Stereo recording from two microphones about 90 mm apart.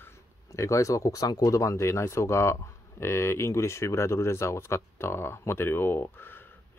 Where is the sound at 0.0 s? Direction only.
35° left (ahead or behind).